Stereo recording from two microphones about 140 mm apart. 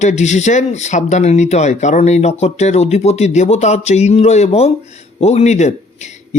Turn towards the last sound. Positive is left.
turn(degrees=55)  # may be behind; listen again after turning